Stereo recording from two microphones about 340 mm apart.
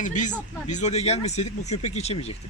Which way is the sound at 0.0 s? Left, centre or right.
Left.